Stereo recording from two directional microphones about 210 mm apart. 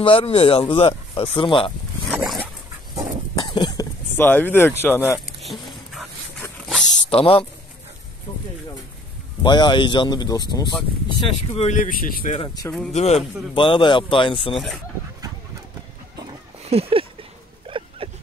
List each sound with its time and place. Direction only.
0.0 s speech: 25° left (ahead or behind)
2.0 s dog: 5° right (ahead or behind)
3.5 s a sound: 20° left (ahead or behind)
4.8 s speech: 10° left (ahead or behind)
5.4 s a sound: centre (ahead or behind)
7.1 s speech: 25° left (ahead or behind)
9.4 s speech: 20° left (ahead or behind)
11.2 s speech: 30° left (ahead or behind)
12.4 s speech: 15° left (ahead or behind)
12.9 s speech: 30° left (ahead or behind)
16.6 s speech: 30° right (ahead or behind)
17.6 s a sound: 25° right (ahead or behind)